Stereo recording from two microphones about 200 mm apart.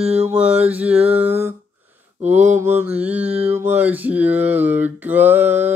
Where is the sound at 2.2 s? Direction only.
35° right (ahead or behind).